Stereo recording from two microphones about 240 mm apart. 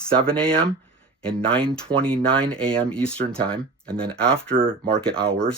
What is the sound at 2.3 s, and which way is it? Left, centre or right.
Speech, centre.